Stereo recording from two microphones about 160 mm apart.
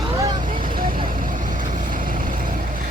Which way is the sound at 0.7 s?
60° right (ahead or behind).